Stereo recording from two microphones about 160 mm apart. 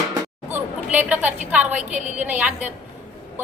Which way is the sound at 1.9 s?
50° right (ahead or behind).